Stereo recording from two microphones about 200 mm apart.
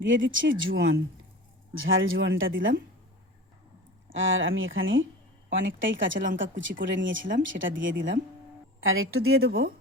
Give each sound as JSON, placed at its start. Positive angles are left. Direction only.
{"t": 0.0, "sound": "speech", "side_deg": -70}
{"t": 0.5, "sound": "speech", "side_deg": -45}
{"t": 1.7, "sound": "speech", "side_deg": -80}
{"t": 4.1, "sound": "speech", "side_deg": -75}
{"t": 8.8, "sound": "speech", "side_deg": -85}